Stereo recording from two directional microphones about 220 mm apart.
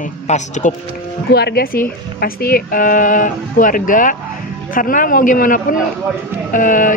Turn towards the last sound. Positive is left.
turn(degrees=35)  # may be behind; listen again after turning